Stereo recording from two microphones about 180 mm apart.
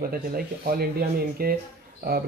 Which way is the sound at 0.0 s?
55° right (ahead or behind).